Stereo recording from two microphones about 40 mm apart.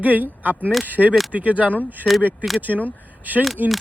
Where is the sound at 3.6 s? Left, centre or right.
Right.